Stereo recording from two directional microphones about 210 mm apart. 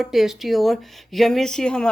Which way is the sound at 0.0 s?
Centre (ahead or behind).